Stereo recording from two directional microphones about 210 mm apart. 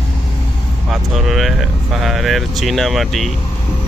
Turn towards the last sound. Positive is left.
turn(degrees=0)  # may be behind; listen again after turning